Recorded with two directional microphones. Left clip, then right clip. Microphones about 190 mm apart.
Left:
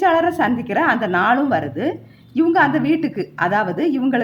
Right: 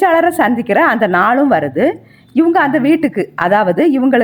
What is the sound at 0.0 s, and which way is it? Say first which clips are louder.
A woman's voice: right 5 dB; 35° right (ahead or behind).